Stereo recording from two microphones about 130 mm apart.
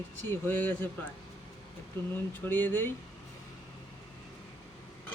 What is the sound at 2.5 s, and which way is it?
Speech, 15° left (ahead or behind).